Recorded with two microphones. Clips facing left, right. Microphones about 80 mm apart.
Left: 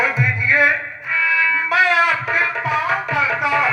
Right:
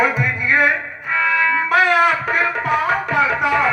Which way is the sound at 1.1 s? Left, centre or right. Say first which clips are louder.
Right 2 dB; right.